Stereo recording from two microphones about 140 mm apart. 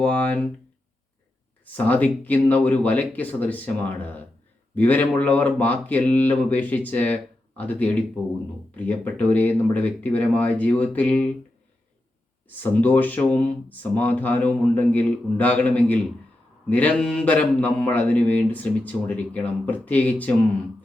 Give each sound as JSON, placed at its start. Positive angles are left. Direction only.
{"t": 0.0, "sound": "speech", "side_deg": 10}
{"t": 1.7, "sound": "speech", "side_deg": 10}
{"t": 12.5, "sound": "speech", "side_deg": 15}